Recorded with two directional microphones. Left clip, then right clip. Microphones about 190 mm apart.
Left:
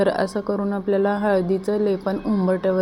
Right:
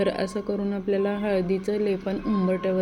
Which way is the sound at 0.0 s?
10° right (ahead or behind).